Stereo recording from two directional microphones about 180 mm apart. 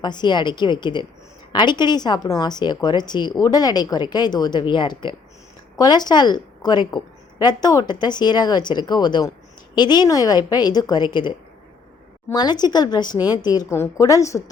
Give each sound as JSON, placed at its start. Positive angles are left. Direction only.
{"t": 0.0, "sound": "a woman's voice", "side_deg": 25}